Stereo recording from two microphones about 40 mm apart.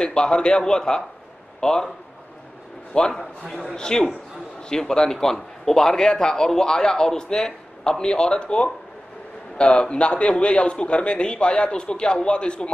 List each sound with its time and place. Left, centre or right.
0.0 s a man's voice: left
2.9 s a man's voice: left
3.4 s a man's voice: centre
3.7 s a man's voice: centre